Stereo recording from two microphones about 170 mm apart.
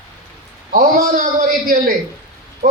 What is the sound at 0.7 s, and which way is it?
A man's voice, 50° right (ahead or behind).